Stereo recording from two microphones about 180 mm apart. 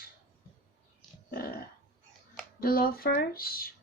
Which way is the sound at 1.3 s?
55° left (ahead or behind).